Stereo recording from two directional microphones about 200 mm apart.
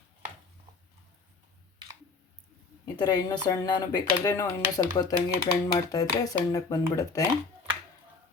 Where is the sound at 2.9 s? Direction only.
20° left (ahead or behind).